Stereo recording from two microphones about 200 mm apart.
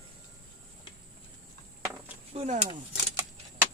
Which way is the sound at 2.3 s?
30° right (ahead or behind).